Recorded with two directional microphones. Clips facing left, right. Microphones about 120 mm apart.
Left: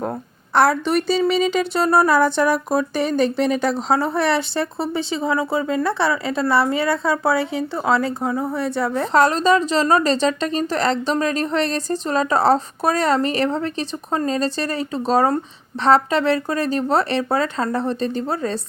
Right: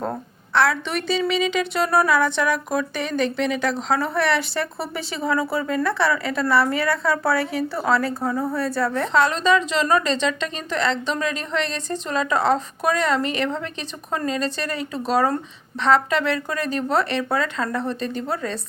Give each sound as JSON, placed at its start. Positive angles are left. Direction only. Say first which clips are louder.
{"t": 0.5, "sound": "a woman's voice", "louder": "left 4 dB", "side_deg": 45}
{"t": 9.0, "sound": "a woman's voice", "louder": "left 5 dB", "side_deg": 40}